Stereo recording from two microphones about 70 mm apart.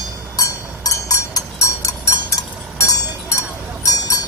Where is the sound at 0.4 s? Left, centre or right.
Left.